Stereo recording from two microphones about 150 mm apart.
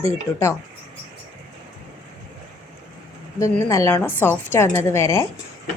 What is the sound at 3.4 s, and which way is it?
A woman's voice, 20° left (ahead or behind).